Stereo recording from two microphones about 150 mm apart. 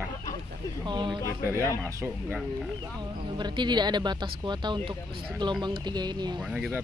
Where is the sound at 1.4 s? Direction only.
20° right (ahead or behind).